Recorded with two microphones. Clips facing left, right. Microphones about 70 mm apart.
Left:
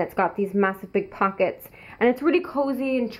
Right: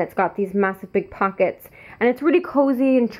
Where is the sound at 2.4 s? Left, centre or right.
Centre.